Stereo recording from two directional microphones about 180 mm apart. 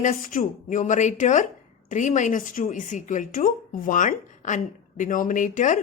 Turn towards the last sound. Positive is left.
turn(degrees=45)  # may be behind; listen again after turning